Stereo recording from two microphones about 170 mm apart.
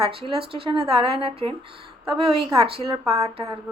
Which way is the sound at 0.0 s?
30° right (ahead or behind).